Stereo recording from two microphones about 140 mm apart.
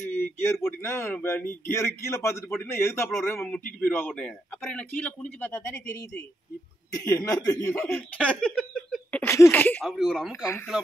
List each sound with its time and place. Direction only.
0.2 s a man's voice: 15° left (ahead or behind)
7.8 s a man's voice: 10° left (ahead or behind)
9.8 s speech: centre (ahead or behind)
10.3 s speech: 20° left (ahead or behind)